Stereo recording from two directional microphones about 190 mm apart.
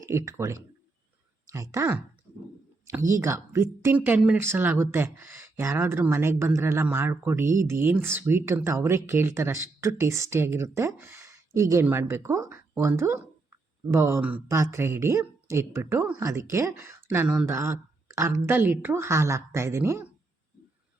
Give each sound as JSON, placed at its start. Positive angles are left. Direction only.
{"t": 0.0, "sound": "speech", "side_deg": -15}